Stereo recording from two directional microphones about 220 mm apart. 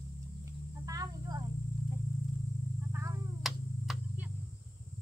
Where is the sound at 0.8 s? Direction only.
15° right (ahead or behind).